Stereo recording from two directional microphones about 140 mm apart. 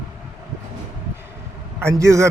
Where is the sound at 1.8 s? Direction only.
20° right (ahead or behind).